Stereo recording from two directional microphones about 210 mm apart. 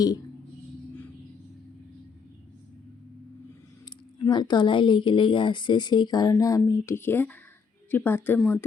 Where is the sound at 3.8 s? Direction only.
20° left (ahead or behind).